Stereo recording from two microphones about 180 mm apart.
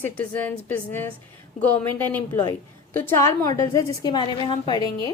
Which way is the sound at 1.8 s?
10° left (ahead or behind).